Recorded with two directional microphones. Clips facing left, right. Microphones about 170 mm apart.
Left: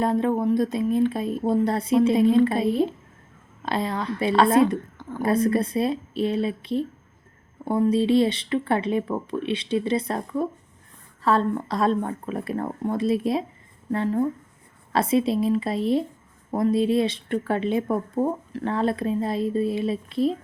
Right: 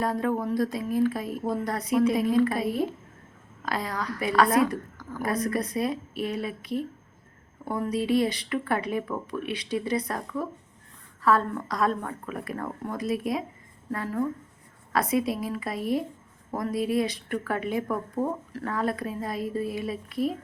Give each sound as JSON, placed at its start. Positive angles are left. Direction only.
{"t": 0.0, "sound": "a woman's voice", "side_deg": 25}